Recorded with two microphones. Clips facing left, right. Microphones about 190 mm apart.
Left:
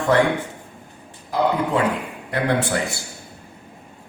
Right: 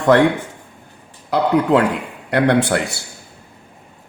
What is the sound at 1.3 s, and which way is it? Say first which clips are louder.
A man's voice: right 5 dB; 80° right.